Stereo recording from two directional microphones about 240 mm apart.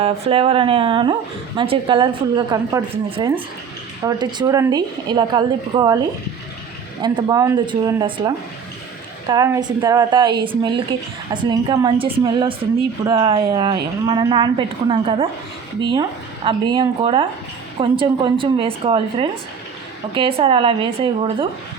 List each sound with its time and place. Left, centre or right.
0.0 s a woman's voice: right
7.0 s a woman's voice: centre
9.3 s a woman's voice: centre